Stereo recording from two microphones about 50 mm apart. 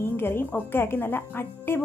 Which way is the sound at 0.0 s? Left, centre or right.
Left.